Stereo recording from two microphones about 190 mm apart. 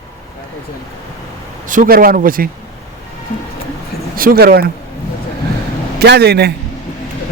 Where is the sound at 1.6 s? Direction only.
45° right (ahead or behind).